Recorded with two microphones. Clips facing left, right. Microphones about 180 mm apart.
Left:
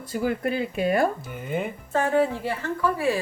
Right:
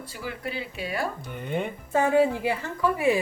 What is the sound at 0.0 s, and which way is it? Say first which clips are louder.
Speech: left 9 dB; 50° left (ahead or behind).